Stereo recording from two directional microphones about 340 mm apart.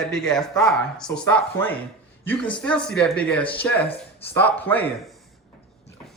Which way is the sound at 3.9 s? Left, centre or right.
Centre.